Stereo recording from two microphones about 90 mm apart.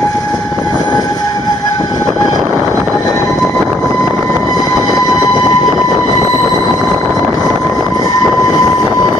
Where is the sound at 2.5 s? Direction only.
15° right (ahead or behind).